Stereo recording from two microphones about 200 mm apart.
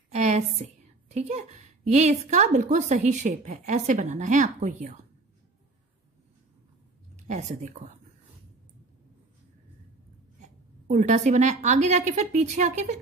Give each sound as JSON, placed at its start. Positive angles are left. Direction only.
{"t": 0.1, "sound": "a sound", "side_deg": -35}
{"t": 1.1, "sound": "a woman's voice", "side_deg": -35}
{"t": 7.2, "sound": "a woman's voice", "side_deg": -35}
{"t": 10.9, "sound": "a woman's voice", "side_deg": -35}